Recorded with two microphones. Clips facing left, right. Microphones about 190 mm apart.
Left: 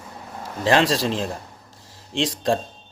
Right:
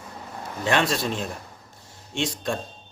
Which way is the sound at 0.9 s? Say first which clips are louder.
Left 4 dB; 30° left (ahead or behind).